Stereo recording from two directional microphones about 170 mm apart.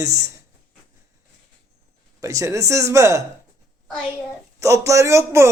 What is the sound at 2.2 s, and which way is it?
A man's voice, 20° right (ahead or behind).